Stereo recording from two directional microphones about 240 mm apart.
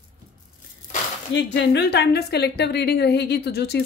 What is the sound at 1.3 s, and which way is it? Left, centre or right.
A woman's voice, left.